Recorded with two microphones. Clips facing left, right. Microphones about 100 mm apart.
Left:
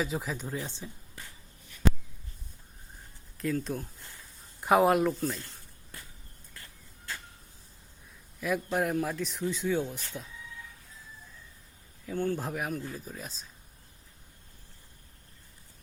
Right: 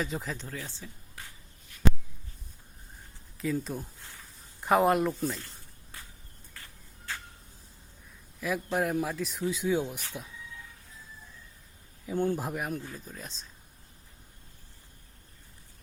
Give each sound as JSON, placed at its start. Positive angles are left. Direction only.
{"t": 0.0, "sound": "a man's voice", "side_deg": 5}
{"t": 0.5, "sound": "speech", "side_deg": 20}
{"t": 3.3, "sound": "a man's voice", "side_deg": 0}
{"t": 8.4, "sound": "a man's voice", "side_deg": 0}
{"t": 12.0, "sound": "speech", "side_deg": -20}
{"t": 12.4, "sound": "a man's voice", "side_deg": 0}